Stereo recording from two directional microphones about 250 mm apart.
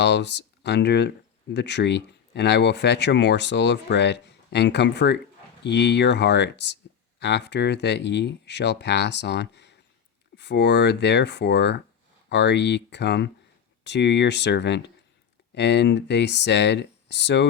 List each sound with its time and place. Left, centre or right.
0.0 s speech: left